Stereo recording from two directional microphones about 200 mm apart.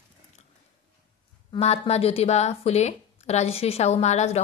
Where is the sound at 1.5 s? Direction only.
30° left (ahead or behind).